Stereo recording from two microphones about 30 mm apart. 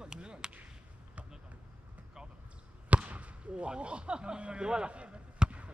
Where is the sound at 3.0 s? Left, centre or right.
Right.